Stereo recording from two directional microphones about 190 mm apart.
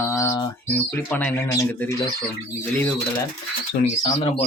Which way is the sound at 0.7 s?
5° left (ahead or behind).